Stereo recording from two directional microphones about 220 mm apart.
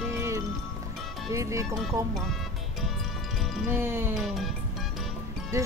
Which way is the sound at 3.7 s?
10° right (ahead or behind).